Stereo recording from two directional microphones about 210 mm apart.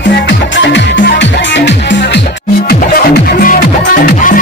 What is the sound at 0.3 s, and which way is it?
Music, 55° left (ahead or behind).